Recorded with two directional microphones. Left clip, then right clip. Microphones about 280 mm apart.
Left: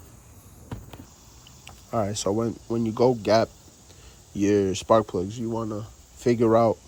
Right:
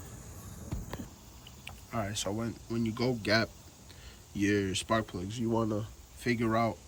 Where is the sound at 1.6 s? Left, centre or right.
Centre.